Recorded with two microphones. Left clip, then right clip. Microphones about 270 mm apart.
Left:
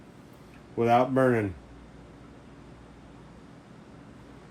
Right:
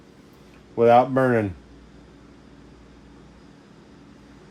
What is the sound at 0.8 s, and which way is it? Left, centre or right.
Speech, right.